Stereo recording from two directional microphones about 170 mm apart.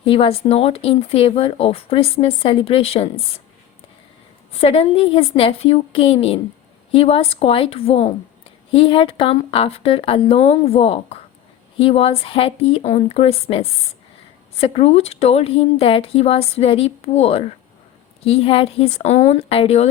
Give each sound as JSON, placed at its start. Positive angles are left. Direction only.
{"t": 0.0, "sound": "speech", "side_deg": 30}
{"t": 4.5, "sound": "speech", "side_deg": 35}